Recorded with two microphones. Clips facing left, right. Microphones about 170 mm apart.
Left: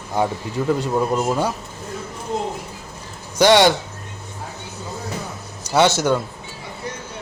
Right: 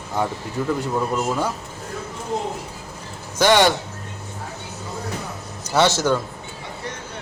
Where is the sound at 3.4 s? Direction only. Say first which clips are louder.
Left 3 dB; 20° left (ahead or behind).